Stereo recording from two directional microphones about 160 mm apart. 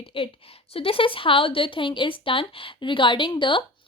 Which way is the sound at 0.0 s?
35° left (ahead or behind).